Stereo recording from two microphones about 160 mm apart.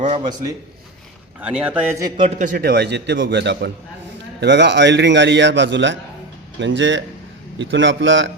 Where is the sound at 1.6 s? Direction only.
10° right (ahead or behind).